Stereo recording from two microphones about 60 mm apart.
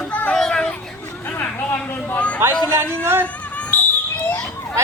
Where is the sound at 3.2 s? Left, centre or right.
Left.